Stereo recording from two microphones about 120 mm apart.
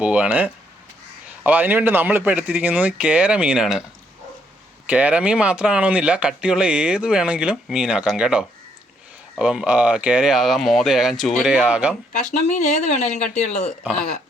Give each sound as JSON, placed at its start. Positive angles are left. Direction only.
{"t": 0.0, "sound": "speech", "side_deg": -10}
{"t": 4.9, "sound": "speech", "side_deg": -10}
{"t": 12.2, "sound": "speech", "side_deg": 80}